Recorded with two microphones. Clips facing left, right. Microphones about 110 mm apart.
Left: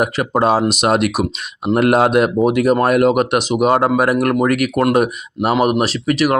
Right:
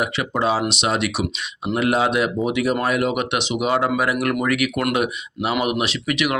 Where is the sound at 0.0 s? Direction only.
45° left (ahead or behind).